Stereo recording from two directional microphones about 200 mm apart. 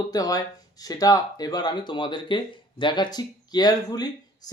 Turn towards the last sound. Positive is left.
turn(degrees=20)  # may be behind; listen again after turning